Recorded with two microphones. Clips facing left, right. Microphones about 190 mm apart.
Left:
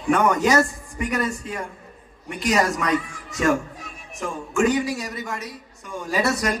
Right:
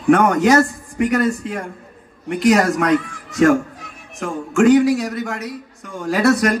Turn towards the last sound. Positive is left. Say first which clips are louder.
# right 7 dB
turn(degrees=-55)  # may be behind; listen again after turning